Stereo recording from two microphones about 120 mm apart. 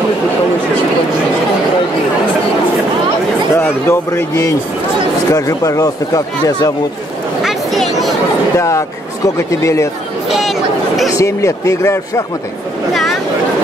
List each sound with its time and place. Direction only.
3.5 s speech: 20° left (ahead or behind)
7.4 s a sound: centre (ahead or behind)
8.5 s speech: 25° left (ahead or behind)
10.2 s chatter: 5° right (ahead or behind)
11.1 s speech: 25° left (ahead or behind)